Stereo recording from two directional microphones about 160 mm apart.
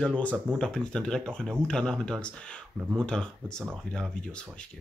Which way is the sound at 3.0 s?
5° left (ahead or behind).